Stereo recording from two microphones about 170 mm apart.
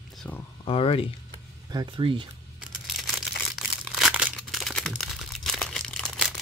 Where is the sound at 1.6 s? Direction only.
25° right (ahead or behind).